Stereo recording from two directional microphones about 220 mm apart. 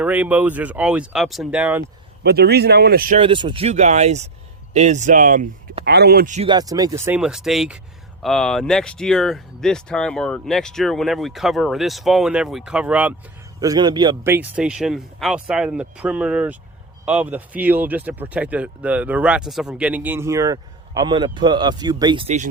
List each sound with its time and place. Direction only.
0.0 s speech: 5° right (ahead or behind)
2.2 s speech: 45° right (ahead or behind)
3.2 s speech: 20° right (ahead or behind)
6.5 s speech: 15° right (ahead or behind)
7.0 s speech: 5° right (ahead or behind)
13.6 s speech: 20° right (ahead or behind)